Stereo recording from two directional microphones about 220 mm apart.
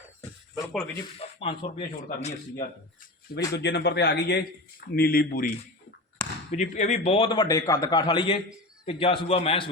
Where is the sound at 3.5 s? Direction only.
50° left (ahead or behind).